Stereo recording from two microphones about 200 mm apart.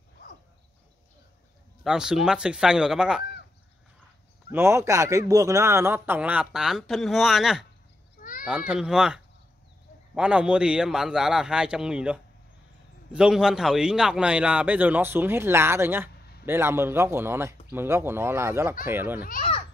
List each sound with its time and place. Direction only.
1.9 s speech: 5° right (ahead or behind)
4.5 s a man's voice: 10° right (ahead or behind)
8.2 s a sound: 45° left (ahead or behind)
8.5 s a man's voice: 5° right (ahead or behind)
19.2 s a child's voice: 45° left (ahead or behind)